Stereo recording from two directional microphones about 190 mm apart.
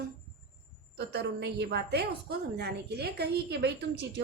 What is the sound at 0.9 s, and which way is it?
A woman's voice, 60° right (ahead or behind).